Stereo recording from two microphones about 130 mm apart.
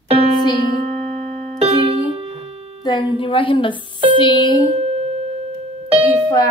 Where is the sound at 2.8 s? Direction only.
35° left (ahead or behind).